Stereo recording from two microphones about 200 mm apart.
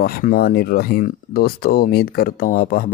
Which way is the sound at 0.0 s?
45° left (ahead or behind).